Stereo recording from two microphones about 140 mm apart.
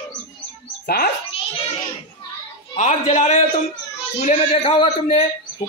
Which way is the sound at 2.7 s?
60° left (ahead or behind).